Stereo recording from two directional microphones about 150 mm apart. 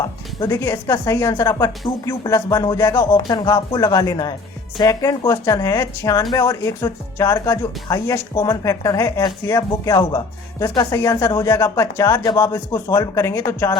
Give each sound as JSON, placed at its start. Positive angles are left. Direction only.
{"t": 0.3, "sound": "speech", "side_deg": 20}